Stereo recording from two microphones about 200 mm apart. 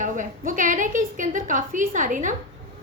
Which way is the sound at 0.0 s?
40° right (ahead or behind).